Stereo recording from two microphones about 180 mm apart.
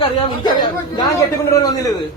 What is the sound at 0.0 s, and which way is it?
A man's voice, 25° left (ahead or behind).